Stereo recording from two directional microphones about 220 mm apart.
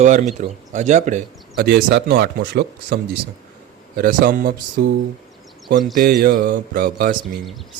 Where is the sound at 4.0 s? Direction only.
40° right (ahead or behind).